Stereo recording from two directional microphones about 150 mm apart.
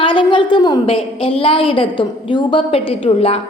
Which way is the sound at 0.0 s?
35° left (ahead or behind).